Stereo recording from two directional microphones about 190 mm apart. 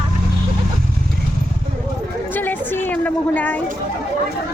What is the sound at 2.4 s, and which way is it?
A woman's voice, 10° left (ahead or behind).